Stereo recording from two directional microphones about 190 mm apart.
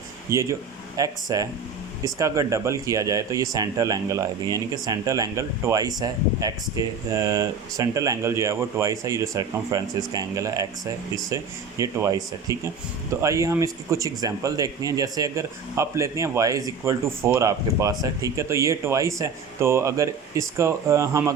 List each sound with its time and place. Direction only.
0.3 s speech: 15° right (ahead or behind)